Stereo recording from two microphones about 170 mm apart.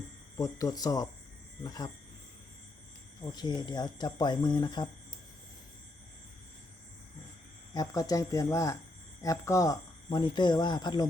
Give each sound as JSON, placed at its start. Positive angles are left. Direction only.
{"t": 0.3, "sound": "speech", "side_deg": 20}
{"t": 3.3, "sound": "speech", "side_deg": 25}
{"t": 7.7, "sound": "speech", "side_deg": 20}